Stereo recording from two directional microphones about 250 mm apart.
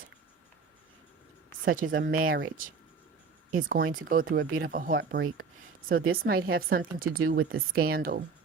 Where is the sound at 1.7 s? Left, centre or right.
Right.